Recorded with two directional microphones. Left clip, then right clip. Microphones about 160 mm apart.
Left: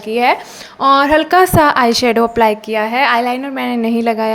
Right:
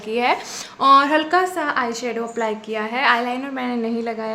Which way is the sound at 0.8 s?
25° left (ahead or behind).